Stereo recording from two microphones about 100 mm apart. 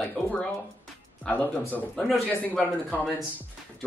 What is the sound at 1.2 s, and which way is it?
Speech, 15° left (ahead or behind).